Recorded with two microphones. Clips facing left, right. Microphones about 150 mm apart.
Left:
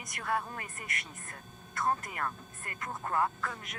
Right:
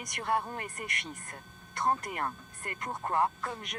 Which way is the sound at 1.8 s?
30° right (ahead or behind).